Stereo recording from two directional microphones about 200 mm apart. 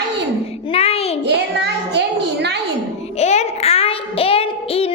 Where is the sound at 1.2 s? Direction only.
60° right (ahead or behind).